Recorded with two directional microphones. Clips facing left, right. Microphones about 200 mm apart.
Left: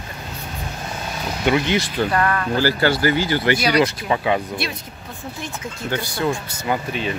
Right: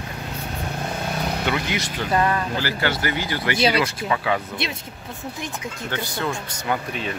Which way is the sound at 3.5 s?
25° right (ahead or behind).